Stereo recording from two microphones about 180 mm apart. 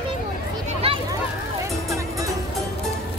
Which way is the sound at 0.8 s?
30° right (ahead or behind).